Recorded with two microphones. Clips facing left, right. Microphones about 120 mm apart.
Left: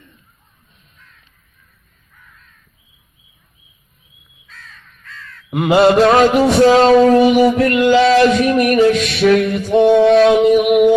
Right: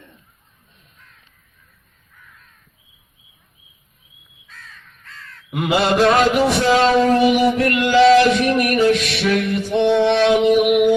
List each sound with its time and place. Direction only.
5.5 s mantra: 40° left (ahead or behind)
6.1 s music: 40° left (ahead or behind)